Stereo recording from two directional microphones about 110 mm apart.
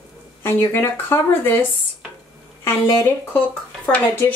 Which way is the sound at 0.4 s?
20° left (ahead or behind).